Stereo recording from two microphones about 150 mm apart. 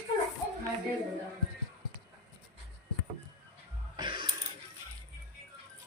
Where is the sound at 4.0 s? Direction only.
30° right (ahead or behind).